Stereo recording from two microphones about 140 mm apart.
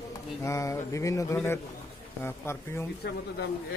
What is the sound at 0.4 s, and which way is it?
Speech, 20° left (ahead or behind).